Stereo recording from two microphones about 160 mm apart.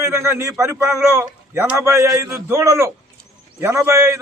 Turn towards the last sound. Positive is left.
turn(degrees=-20)  # may be behind; listen again after turning